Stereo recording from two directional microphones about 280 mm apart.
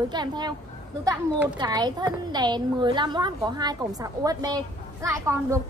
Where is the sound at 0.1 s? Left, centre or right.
Centre.